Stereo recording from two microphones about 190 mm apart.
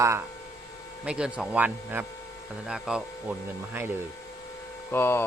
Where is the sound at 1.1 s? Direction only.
5° right (ahead or behind).